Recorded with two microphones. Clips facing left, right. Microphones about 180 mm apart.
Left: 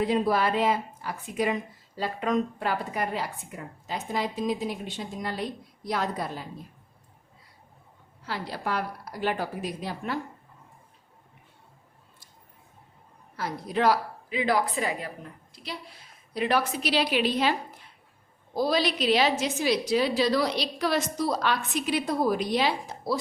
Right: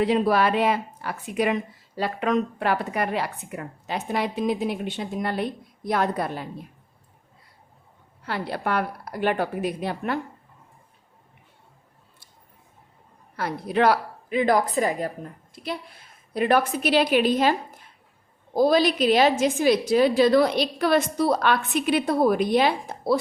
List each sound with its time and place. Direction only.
0.0 s a woman's voice: 75° right (ahead or behind)
8.2 s a woman's voice: 60° right (ahead or behind)
13.3 s a woman's voice: 65° right (ahead or behind)